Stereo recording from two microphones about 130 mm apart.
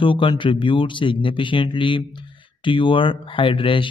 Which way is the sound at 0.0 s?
40° left (ahead or behind).